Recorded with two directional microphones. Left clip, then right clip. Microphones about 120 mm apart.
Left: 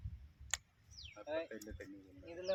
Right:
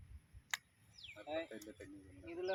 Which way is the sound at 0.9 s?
40° left (ahead or behind).